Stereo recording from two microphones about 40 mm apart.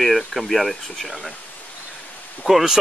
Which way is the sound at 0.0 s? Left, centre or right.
Centre.